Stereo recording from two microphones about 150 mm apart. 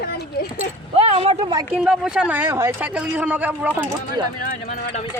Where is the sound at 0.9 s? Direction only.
40° right (ahead or behind).